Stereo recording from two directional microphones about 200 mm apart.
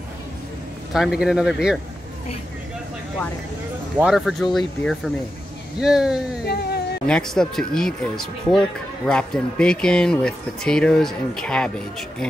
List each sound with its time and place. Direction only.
0.9 s speech: centre (ahead or behind)
4.0 s speech: centre (ahead or behind)
6.4 s a sound: 55° left (ahead or behind)
7.1 s speech: 5° left (ahead or behind)